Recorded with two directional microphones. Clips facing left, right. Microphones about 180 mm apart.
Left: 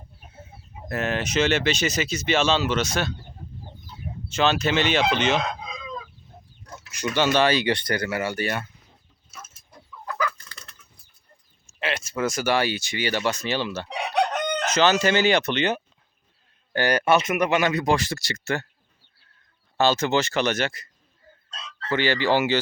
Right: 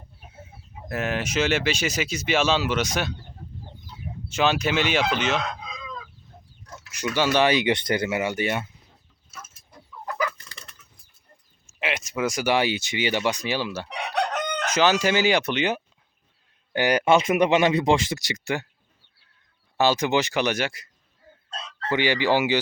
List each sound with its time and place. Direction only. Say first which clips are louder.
0.9 s speech: left 1 dB; 10° right (ahead or behind)
4.3 s speech: left 1 dB; 10° right (ahead or behind)
6.9 s speech: even; 15° right (ahead or behind)
10.2 s chicken: left 2 dB; 20° right (ahead or behind)
11.6 s speech: even; 15° right (ahead or behind)
17.2 s speech: right 3 dB; 25° right (ahead or behind)
19.7 s speech: even; 10° right (ahead or behind)
21.5 s chicken: right 4 dB; 55° right (ahead or behind)
21.8 s speech: even; 15° right (ahead or behind)